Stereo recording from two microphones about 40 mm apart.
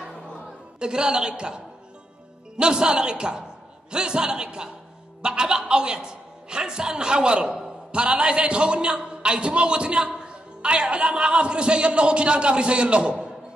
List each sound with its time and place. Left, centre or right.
0.7 s a man's voice: right
7.9 s speech: right